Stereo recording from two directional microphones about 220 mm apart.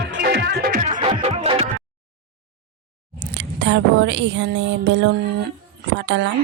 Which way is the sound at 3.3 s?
50° right (ahead or behind).